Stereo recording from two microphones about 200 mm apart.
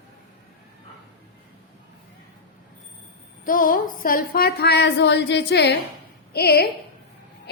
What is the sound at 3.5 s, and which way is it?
A woman's voice, 45° left (ahead or behind).